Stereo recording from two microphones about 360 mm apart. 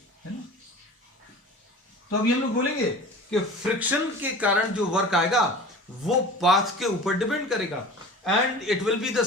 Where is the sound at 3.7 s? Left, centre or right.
Centre.